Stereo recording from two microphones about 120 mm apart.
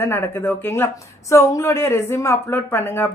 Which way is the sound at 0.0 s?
20° left (ahead or behind).